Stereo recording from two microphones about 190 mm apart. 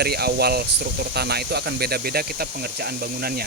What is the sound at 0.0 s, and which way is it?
Speech, 55° right (ahead or behind).